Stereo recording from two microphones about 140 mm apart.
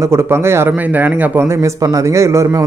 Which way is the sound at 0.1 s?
20° right (ahead or behind).